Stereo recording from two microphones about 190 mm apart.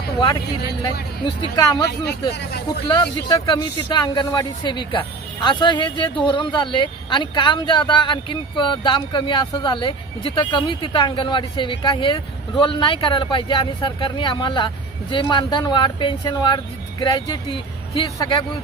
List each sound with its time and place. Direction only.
1.5 s speech: 20° left (ahead or behind)
2.3 s speech: 60° left (ahead or behind)
2.9 s speech: 25° left (ahead or behind)